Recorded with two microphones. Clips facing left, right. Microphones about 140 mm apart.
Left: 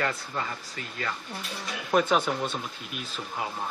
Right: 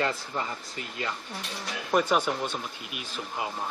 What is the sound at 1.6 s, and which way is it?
Speech, centre (ahead or behind).